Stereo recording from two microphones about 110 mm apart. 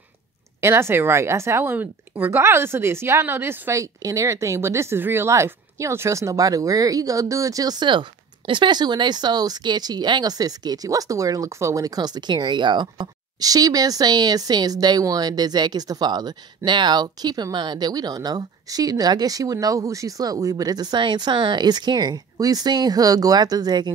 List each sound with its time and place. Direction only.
0.6 s speech: 25° right (ahead or behind)